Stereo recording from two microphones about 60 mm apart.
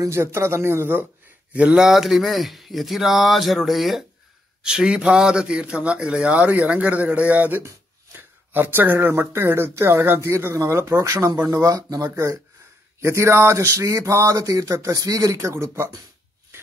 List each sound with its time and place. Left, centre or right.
0.0 s speech: right
1.5 s speech: right
1.8 s speech: centre
4.6 s a man's voice: centre
8.1 s speech: right
10.8 s a sound: right
11.4 s speech: right
12.1 s a sound: right